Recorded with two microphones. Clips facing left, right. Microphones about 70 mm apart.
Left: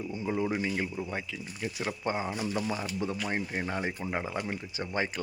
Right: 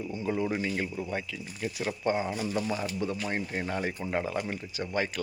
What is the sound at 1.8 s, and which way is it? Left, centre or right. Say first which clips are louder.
Speech: right 3 dB; left.